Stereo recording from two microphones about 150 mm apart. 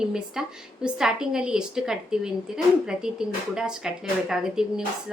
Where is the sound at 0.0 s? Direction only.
5° right (ahead or behind).